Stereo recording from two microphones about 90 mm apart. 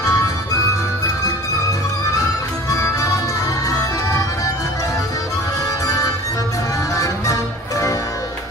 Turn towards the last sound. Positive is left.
turn(degrees=40)  # may be behind; listen again after turning